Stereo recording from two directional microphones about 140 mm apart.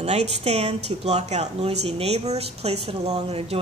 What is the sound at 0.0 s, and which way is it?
Speech, 50° right (ahead or behind).